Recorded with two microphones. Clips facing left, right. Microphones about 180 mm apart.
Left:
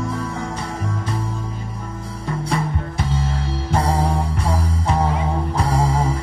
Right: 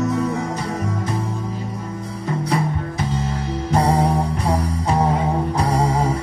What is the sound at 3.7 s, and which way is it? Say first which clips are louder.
Music: right 3 dB; 30° right (ahead or behind).